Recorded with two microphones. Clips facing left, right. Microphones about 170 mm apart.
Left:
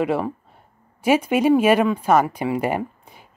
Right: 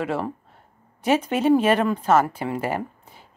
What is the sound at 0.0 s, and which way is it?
A woman's voice, 15° left (ahead or behind).